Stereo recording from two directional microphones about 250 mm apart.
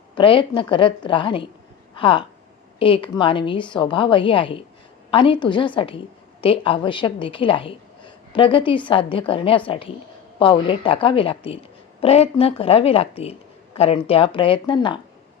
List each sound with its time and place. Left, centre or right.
0.2 s a woman's voice: centre